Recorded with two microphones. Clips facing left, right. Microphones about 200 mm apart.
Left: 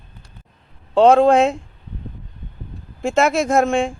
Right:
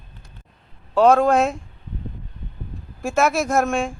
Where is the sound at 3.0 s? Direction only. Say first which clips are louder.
Left 3 dB; 25° left (ahead or behind).